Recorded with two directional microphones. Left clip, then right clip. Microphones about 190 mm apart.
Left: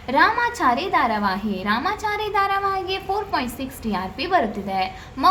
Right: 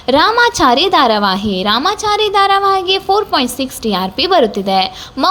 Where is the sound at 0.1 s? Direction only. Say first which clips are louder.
Right 8 dB; 45° right (ahead or behind).